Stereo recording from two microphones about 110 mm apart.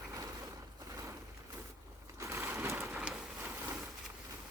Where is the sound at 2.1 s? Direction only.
25° right (ahead or behind).